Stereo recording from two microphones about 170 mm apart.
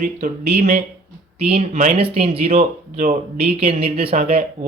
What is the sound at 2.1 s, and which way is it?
Speech, 35° right (ahead or behind).